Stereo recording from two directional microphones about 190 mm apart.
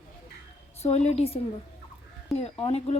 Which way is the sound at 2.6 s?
35° left (ahead or behind).